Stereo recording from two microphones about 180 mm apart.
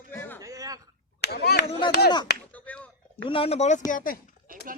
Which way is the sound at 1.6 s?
30° left (ahead or behind).